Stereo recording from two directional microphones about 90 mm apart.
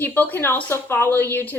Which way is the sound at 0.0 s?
20° left (ahead or behind).